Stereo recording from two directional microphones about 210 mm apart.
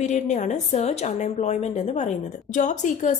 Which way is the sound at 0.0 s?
35° left (ahead or behind).